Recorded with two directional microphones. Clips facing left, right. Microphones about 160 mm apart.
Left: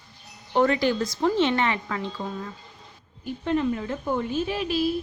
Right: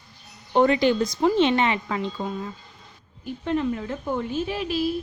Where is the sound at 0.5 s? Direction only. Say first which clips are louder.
Right 3 dB; 20° right (ahead or behind).